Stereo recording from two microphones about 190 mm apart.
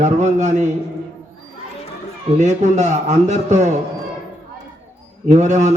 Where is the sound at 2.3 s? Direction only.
40° right (ahead or behind).